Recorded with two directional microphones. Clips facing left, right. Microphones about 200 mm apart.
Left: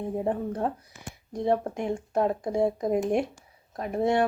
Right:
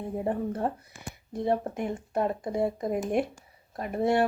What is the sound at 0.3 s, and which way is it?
Speech, 5° right (ahead or behind).